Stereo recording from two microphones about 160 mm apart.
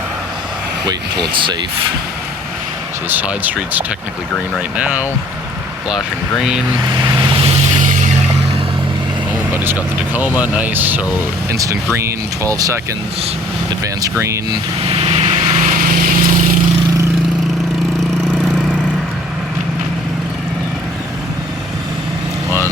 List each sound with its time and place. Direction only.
1.3 s speech: 30° right (ahead or behind)
3.1 s speech: 10° right (ahead or behind)
6.8 s vehicle: 25° right (ahead or behind); by 8.0 s 50° right (ahead or behind)
9.6 s speech: 10° right (ahead or behind)
14.8 s vehicle: 35° right (ahead or behind); by 16.6 s 60° right (ahead or behind)
18.3 s vehicle: 5° left (ahead or behind)